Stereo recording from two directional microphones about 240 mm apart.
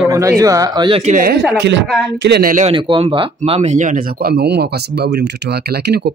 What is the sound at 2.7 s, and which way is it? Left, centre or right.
Speech, right.